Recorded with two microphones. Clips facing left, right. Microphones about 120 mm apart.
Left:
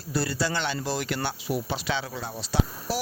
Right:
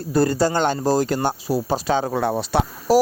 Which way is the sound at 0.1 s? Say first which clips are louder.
Right 9 dB; 45° right (ahead or behind).